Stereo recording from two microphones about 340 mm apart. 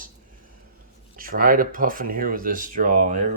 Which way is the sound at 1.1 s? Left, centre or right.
Right.